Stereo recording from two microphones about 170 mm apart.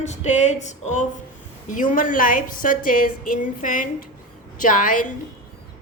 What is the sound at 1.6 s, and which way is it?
A woman's voice, 50° left (ahead or behind).